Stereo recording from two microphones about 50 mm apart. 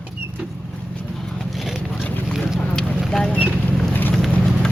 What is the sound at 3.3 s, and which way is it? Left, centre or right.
Speech, left.